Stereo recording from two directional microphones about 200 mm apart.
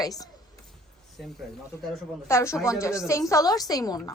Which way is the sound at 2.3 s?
15° left (ahead or behind).